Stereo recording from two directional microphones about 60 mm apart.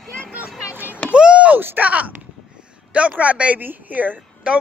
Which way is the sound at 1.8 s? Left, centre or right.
Right.